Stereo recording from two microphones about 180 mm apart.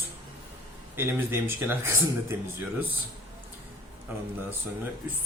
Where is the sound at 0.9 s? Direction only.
10° right (ahead or behind).